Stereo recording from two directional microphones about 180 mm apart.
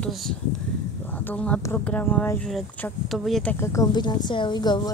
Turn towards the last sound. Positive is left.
turn(degrees=25)  # may be behind; listen again after turning